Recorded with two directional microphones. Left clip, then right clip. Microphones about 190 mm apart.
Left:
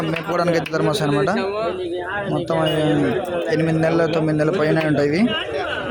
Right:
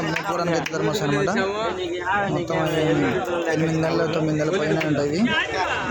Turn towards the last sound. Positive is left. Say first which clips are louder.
# left 4 dB
turn(degrees=10)  # may be behind; listen again after turning